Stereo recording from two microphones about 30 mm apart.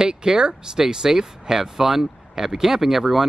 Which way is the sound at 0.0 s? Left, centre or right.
Right.